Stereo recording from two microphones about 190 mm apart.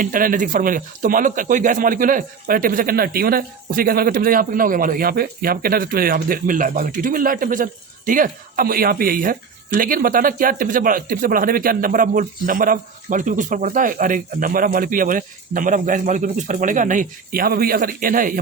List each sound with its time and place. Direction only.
0.0 s speech: 45° right (ahead or behind)